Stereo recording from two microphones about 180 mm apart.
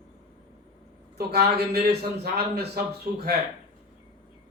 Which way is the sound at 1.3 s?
65° right (ahead or behind).